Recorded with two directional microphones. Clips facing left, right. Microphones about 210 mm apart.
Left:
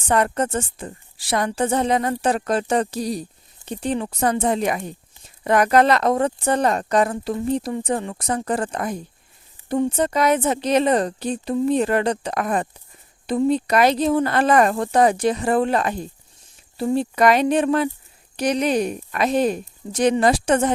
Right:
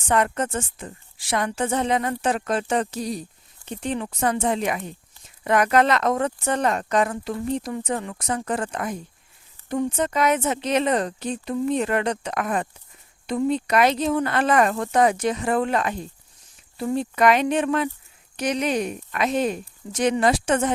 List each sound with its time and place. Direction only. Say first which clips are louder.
0.1 s a woman's voice: left 2 dB; 35° left (ahead or behind)